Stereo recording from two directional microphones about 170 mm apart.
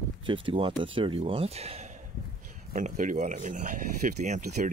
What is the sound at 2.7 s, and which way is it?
Speech, 50° right (ahead or behind).